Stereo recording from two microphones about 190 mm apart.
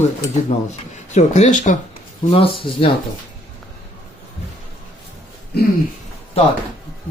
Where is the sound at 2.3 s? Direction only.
30° left (ahead or behind).